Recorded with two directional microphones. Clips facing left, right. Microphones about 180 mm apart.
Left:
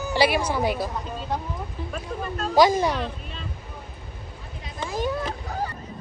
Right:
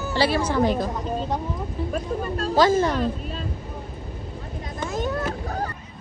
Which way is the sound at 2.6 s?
15° left (ahead or behind).